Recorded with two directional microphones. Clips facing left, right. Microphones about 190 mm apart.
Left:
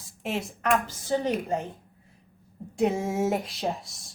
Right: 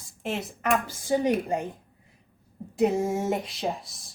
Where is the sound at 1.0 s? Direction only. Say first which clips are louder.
Right 5 dB; 15° right (ahead or behind).